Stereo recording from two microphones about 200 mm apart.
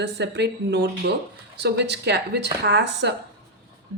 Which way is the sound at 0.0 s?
60° right (ahead or behind).